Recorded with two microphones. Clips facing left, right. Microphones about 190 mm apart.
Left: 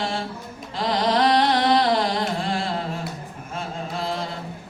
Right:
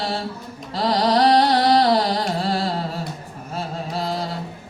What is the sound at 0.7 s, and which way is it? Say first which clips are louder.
Carnatic music: right 3 dB; 35° right (ahead or behind).